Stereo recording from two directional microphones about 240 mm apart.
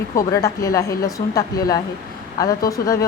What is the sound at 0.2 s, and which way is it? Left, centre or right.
Speech, centre.